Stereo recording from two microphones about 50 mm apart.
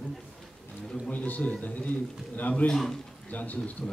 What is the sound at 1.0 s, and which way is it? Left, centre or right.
A man's voice, left.